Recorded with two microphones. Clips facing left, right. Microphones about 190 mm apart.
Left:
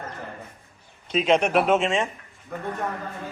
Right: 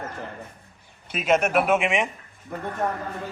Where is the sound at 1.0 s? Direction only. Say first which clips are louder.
Left 1 dB; 5° right (ahead or behind).